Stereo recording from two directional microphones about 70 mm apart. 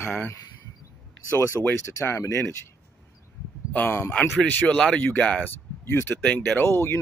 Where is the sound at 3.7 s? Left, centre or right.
Left.